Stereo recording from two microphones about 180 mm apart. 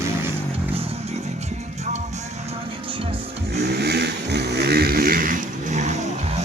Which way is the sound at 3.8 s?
65° right (ahead or behind).